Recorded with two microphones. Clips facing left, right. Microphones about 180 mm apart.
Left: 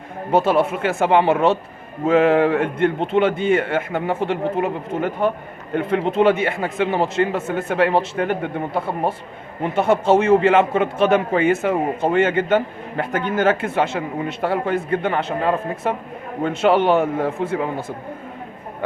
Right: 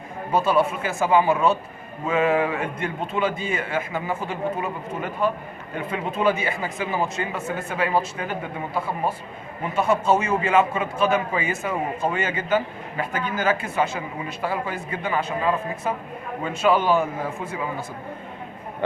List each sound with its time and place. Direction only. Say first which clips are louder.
0.4 s speech: left 3 dB; 60° left (ahead or behind)